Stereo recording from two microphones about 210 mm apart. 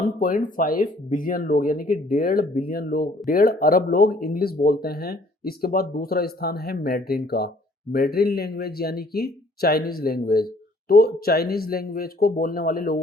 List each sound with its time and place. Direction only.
0.0 s speech: 40° left (ahead or behind)